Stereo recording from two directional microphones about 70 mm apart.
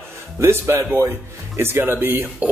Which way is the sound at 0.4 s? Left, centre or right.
Right.